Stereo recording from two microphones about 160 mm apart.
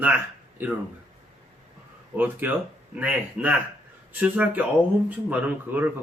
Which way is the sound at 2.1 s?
10° right (ahead or behind).